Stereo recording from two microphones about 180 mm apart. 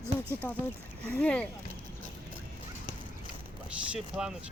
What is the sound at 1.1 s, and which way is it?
Speech, 5° left (ahead or behind).